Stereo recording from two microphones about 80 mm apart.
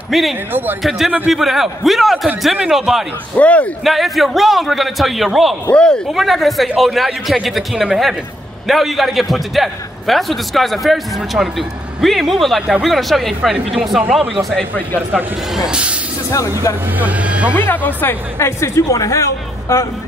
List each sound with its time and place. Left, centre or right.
0.1 s a man's voice: centre
0.5 s speech: right
0.8 s a man's voice: centre
3.3 s speech: centre
3.8 s a man's voice: centre
5.7 s speech: centre
6.1 s a man's voice: centre
14.5 s speech: centre
15.5 s speech: centre
17.0 s speech: centre
17.6 s a woman's voice: left
18.6 s speech: left